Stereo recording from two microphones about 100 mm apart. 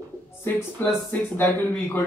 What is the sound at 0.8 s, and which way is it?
Speech, 20° left (ahead or behind).